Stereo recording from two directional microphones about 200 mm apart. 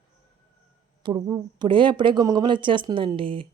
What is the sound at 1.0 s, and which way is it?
A woman's voice, 20° right (ahead or behind).